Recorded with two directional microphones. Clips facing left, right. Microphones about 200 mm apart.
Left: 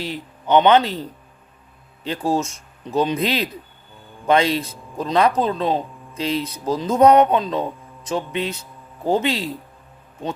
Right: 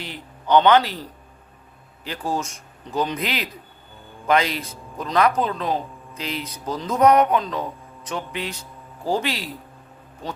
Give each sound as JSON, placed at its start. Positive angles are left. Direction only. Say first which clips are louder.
{"t": 0.0, "sound": "speech", "louder": "left 6 dB", "side_deg": 20}
{"t": 2.0, "sound": "speech", "louder": "left 5 dB", "side_deg": 25}